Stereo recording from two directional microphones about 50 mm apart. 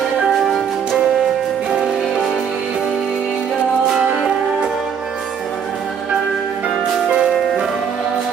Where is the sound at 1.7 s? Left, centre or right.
Centre.